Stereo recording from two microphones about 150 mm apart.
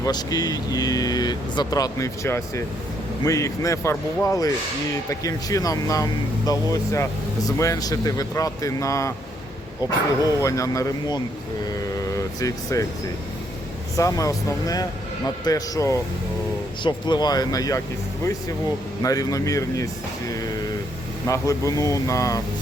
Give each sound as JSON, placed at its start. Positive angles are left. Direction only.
{"t": 0.0, "sound": "speech", "side_deg": 25}
{"t": 11.9, "sound": "vehicle", "side_deg": 20}
{"t": 13.9, "sound": "speech", "side_deg": 20}
{"t": 19.0, "sound": "speech", "side_deg": 25}
{"t": 21.2, "sound": "speech", "side_deg": 20}